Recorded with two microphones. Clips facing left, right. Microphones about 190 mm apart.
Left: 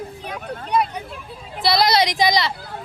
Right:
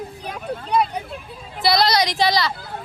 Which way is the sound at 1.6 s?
Centre (ahead or behind).